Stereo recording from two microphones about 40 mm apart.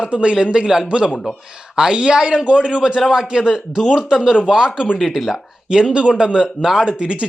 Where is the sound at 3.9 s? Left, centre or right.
Centre.